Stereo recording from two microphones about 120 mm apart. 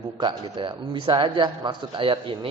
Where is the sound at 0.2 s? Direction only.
40° right (ahead or behind).